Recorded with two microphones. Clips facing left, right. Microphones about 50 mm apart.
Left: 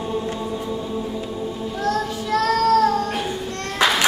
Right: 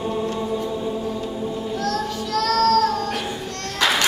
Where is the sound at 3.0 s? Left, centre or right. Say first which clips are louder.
Left 2 dB; centre.